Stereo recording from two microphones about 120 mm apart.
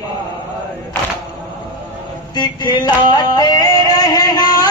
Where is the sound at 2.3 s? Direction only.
35° left (ahead or behind).